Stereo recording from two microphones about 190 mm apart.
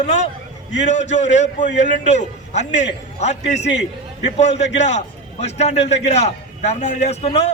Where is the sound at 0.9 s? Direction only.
40° left (ahead or behind).